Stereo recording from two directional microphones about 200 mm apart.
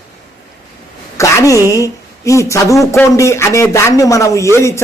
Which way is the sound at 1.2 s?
15° left (ahead or behind).